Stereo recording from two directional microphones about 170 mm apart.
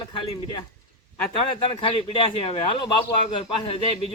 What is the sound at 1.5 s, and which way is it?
Speech, 30° left (ahead or behind).